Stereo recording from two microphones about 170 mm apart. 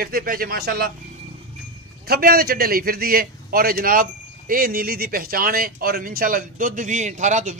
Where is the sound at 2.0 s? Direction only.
65° right (ahead or behind).